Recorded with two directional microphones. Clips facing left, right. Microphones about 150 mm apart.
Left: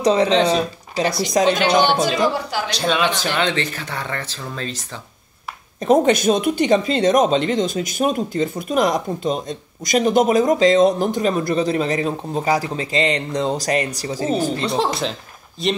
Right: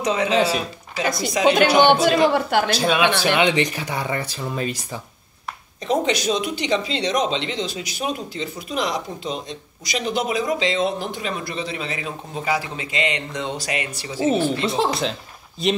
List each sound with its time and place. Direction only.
0.0 s speech: 35° left (ahead or behind)
0.3 s speech: 5° right (ahead or behind)
1.4 s speech: 40° left (ahead or behind)
2.0 s a woman's voice: 60° right (ahead or behind)
2.7 s speech: 5° right (ahead or behind)
5.8 s speech: 50° left (ahead or behind)
14.7 s speech: centre (ahead or behind)